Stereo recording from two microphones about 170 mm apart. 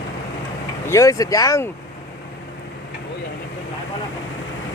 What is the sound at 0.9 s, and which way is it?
Speech, 15° left (ahead or behind).